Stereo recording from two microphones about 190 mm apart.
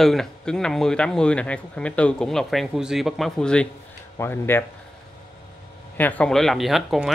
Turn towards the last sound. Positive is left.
turn(degrees=0)  # may be behind; listen again after turning